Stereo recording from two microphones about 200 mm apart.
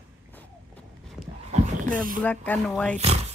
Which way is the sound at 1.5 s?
45° right (ahead or behind).